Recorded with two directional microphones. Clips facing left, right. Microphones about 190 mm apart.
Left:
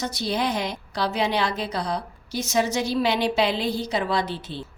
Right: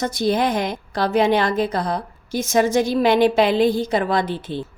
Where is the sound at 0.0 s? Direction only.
50° right (ahead or behind).